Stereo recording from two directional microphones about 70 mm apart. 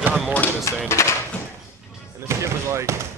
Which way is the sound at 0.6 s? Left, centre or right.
Left.